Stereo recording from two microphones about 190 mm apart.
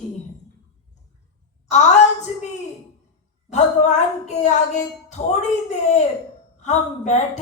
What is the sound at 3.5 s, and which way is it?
A woman's voice, 35° left (ahead or behind).